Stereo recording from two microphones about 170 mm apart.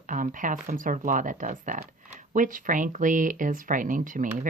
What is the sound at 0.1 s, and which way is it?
Speech, 50° right (ahead or behind).